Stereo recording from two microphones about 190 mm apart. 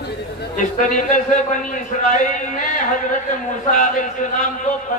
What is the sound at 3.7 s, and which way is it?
Speech, 45° left (ahead or behind).